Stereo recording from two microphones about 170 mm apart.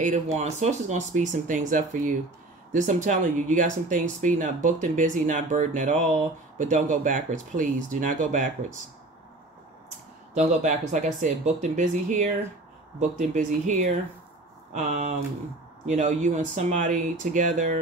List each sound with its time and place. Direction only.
0.0 s speech: 45° right (ahead or behind)
10.3 s speech: 45° right (ahead or behind)